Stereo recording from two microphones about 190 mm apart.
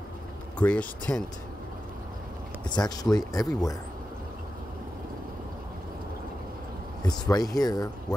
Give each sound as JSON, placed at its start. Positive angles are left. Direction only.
{"t": 0.6, "sound": "speech", "side_deg": 5}
{"t": 2.7, "sound": "speech", "side_deg": 20}
{"t": 7.1, "sound": "speech", "side_deg": 20}